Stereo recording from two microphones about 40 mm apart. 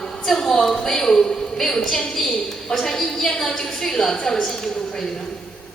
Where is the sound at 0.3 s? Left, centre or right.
Centre.